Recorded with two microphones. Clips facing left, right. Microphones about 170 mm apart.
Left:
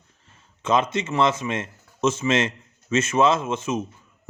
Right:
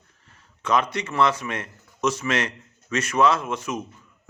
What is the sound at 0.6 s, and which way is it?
Speech, 25° left (ahead or behind).